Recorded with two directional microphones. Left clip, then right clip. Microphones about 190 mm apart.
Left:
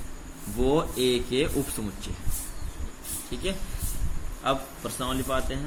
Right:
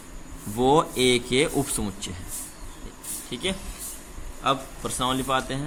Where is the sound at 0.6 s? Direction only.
40° right (ahead or behind).